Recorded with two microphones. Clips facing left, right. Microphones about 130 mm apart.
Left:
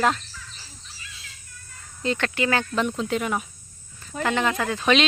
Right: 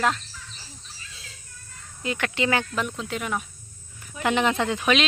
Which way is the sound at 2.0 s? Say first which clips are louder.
Left 3 dB; 10° right (ahead or behind).